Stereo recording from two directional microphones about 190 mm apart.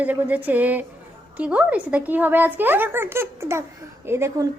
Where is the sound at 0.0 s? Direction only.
10° right (ahead or behind).